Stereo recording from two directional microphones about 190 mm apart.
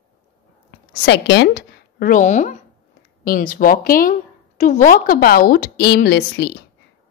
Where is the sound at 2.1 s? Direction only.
40° left (ahead or behind).